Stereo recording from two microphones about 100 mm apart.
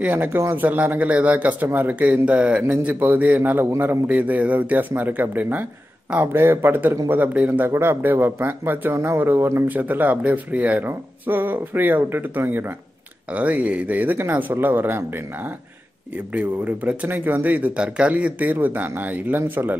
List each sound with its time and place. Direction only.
0.0 s speech: 15° right (ahead or behind)